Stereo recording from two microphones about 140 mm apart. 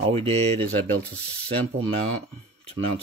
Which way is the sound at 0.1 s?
45° right (ahead or behind).